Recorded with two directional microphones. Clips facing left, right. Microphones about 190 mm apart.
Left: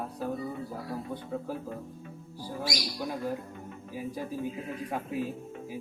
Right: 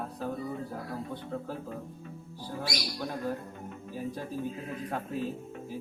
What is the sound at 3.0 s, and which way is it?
Speech, 10° left (ahead or behind).